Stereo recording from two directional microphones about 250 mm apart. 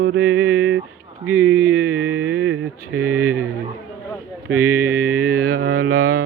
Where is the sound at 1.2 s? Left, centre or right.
Centre.